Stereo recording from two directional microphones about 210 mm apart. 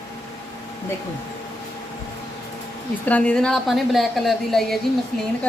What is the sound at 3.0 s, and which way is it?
A woman's voice, 5° left (ahead or behind).